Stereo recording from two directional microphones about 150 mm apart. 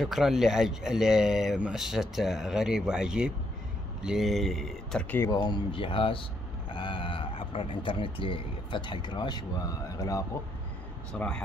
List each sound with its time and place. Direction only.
0.0 s speech: centre (ahead or behind)
5.2 s speech: 25° left (ahead or behind)
11.1 s speech: 5° left (ahead or behind)